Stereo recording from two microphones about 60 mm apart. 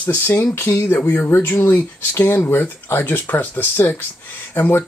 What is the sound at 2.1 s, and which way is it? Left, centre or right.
Speech, left.